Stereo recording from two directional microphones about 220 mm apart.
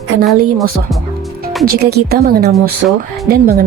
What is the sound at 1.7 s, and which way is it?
Speech, 45° right (ahead or behind).